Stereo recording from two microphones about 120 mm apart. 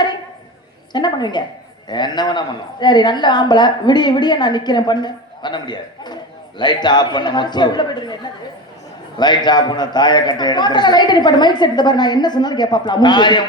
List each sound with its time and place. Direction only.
0.9 s a man's voice: 35° left (ahead or behind)